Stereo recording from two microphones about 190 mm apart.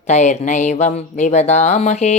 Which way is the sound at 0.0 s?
40° left (ahead or behind).